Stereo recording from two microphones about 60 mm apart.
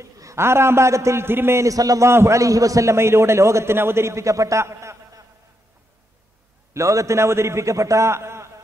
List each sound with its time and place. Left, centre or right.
0.0 s a man's voice: right
1.6 s a man's voice: right
2.0 s a man's voice: right
6.7 s a man's voice: right